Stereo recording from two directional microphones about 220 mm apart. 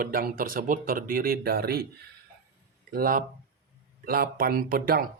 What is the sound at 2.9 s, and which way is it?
Speech, 40° right (ahead or behind).